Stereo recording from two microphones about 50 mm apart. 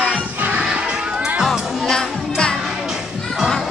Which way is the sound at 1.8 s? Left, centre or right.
Centre.